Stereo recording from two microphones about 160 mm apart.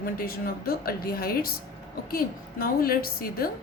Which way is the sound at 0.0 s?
65° left (ahead or behind).